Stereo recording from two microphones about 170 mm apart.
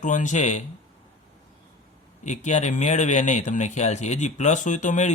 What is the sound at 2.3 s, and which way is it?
Speech, 45° left (ahead or behind).